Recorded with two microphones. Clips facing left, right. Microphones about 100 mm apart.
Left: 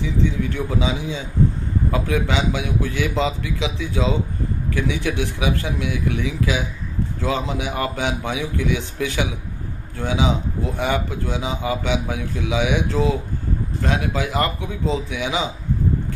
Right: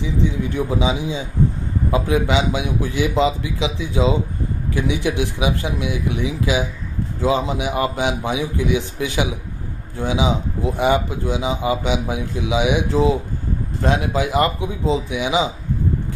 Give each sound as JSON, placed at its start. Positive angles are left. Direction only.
{"t": 0.6, "sound": "a man's voice", "side_deg": -20}